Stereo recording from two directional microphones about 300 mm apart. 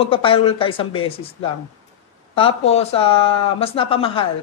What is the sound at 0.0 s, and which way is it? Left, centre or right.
A woman's voice, centre.